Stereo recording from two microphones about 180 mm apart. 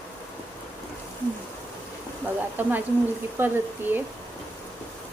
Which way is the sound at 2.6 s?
10° right (ahead or behind).